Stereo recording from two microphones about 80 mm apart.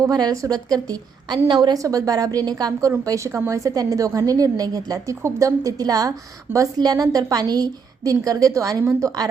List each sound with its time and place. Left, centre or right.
0.0 s a woman's voice: right
1.5 s a woman's voice: right
1.8 s a woman's voice: right
3.0 s a woman's voice: right